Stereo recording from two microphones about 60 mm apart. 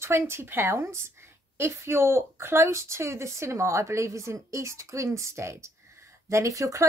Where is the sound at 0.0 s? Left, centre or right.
Right.